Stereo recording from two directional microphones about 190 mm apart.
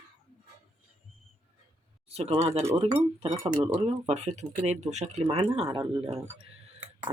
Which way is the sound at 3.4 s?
20° right (ahead or behind).